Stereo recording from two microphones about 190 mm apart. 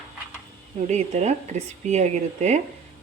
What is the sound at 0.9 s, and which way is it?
Speech, 35° right (ahead or behind).